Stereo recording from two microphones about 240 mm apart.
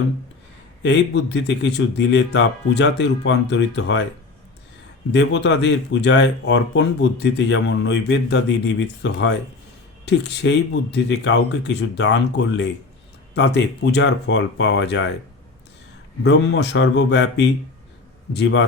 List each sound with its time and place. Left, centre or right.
0.8 s speech: left
5.1 s speech: left
16.2 s speech: left